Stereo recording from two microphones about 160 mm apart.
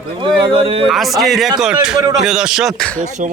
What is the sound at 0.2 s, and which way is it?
Speech, 35° right (ahead or behind).